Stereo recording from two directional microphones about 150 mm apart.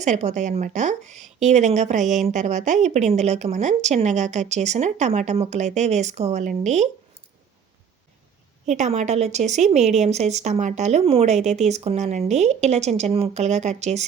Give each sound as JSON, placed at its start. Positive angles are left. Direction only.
{"t": 0.0, "sound": "a woman's voice", "side_deg": -50}
{"t": 8.6, "sound": "a woman's voice", "side_deg": -50}